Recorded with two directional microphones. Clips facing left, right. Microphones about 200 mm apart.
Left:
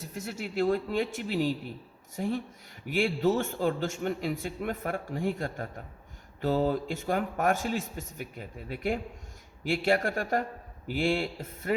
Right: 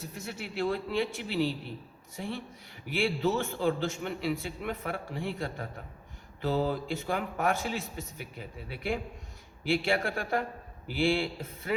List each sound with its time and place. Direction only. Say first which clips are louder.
0.3 s a man's voice: left 4 dB; 45° left (ahead or behind)